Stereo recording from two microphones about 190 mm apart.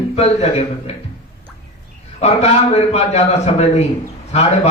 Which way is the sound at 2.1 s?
35° left (ahead or behind).